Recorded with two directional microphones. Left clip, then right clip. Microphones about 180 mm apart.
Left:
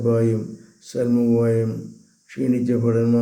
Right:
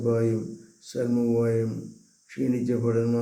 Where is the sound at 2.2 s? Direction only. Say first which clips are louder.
Left 5 dB; 15° left (ahead or behind).